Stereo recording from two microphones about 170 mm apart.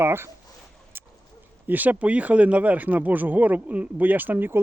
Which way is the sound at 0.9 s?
15° right (ahead or behind).